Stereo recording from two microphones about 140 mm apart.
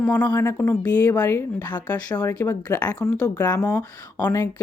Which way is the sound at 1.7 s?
30° left (ahead or behind).